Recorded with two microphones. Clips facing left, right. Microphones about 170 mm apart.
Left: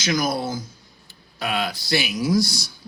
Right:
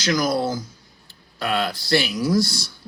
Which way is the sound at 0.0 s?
20° left (ahead or behind).